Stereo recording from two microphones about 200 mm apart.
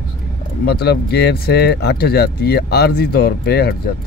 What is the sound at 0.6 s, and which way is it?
Speech, 50° left (ahead or behind).